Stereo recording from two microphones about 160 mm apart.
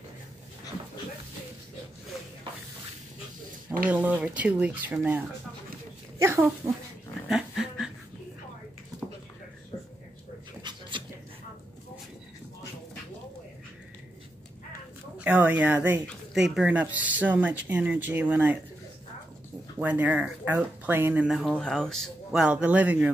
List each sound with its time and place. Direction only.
3.8 s speech: 10° right (ahead or behind)
7.2 s dog: 5° right (ahead or behind)
10.6 s dog: 30° right (ahead or behind)
15.1 s speech: 10° right (ahead or behind)
19.8 s speech: 10° right (ahead or behind)